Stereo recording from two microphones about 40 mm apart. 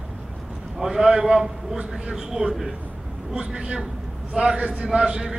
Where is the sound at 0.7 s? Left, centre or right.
Centre.